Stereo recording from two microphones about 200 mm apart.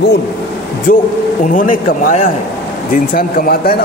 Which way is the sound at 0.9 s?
45° left (ahead or behind).